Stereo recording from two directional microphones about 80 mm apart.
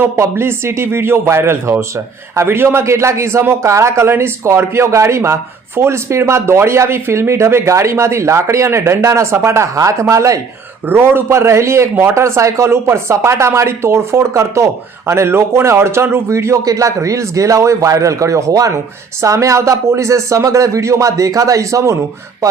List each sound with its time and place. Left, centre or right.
0.0 s a man's voice: right
10.8 s a man's voice: right